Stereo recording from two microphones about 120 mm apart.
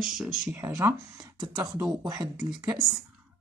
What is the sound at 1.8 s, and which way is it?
Speech, 35° right (ahead or behind).